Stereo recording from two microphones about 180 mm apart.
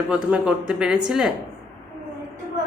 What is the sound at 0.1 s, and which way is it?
A woman's voice, 5° right (ahead or behind).